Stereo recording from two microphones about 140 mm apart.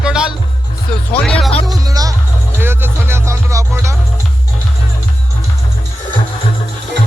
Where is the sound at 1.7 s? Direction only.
25° right (ahead or behind).